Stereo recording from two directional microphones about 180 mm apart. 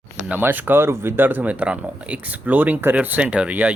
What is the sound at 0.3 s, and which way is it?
Speech, 10° right (ahead or behind).